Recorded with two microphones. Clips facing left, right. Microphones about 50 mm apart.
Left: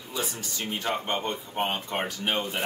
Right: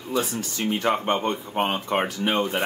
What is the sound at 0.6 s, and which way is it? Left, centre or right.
Speech, right.